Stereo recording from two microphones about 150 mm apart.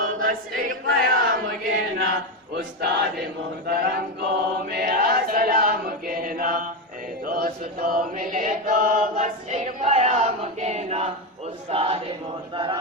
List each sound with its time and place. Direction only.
0.0 s choir: 65° right (ahead or behind)
2.6 s speech: 90° right
3.7 s a sound: 90° right
4.7 s choir: 80° right
7.3 s chant: 75° right (ahead or behind); by 11.1 s 50° right (ahead or behind)
11.7 s speech: 40° right (ahead or behind)